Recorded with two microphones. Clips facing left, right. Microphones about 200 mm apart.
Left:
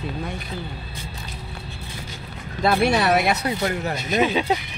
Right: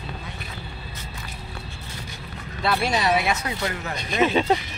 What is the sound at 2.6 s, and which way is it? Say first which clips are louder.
Speech: left 4 dB; 50° left (ahead or behind).